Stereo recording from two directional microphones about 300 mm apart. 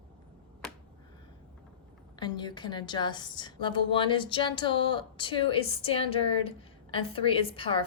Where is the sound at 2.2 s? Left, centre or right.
Centre.